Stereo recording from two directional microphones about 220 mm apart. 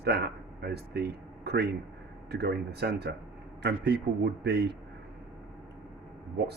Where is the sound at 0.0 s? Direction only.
45° right (ahead or behind).